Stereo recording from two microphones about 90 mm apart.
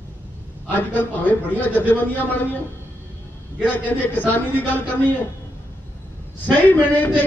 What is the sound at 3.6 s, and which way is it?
Speech, 20° left (ahead or behind).